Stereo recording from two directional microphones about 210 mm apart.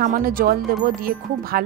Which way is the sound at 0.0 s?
40° right (ahead or behind).